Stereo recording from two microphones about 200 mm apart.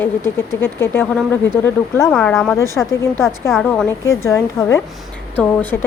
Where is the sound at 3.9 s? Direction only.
15° left (ahead or behind).